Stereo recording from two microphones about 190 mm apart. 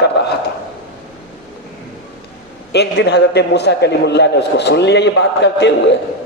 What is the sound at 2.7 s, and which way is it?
A man's voice, 60° left (ahead or behind).